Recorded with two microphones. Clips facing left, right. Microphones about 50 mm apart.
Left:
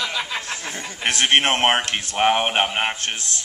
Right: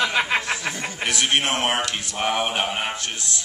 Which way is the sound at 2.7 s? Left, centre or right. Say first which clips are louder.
Left 3 dB; left.